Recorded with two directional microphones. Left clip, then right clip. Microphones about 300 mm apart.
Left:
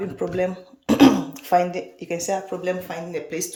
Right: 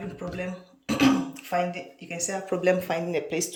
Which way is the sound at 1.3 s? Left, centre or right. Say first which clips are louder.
Left 8 dB; centre.